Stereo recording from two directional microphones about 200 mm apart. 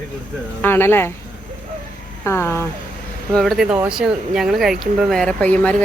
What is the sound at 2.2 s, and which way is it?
Speech, 10° left (ahead or behind).